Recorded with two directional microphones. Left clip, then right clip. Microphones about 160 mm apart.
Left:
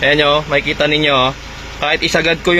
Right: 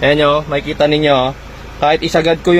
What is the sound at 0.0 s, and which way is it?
Speech, 25° right (ahead or behind).